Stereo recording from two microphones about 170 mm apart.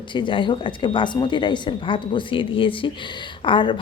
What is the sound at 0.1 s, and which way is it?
Speech, 30° left (ahead or behind).